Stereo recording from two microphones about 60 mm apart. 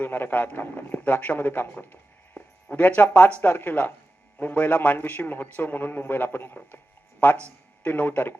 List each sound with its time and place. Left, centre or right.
0.0 s a man's voice: left